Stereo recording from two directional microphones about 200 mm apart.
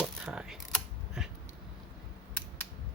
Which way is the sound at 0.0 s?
5° right (ahead or behind).